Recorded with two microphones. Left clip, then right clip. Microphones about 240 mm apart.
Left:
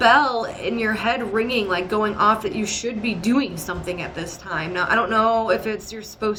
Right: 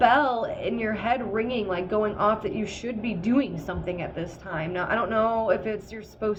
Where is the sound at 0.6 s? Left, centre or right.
Centre.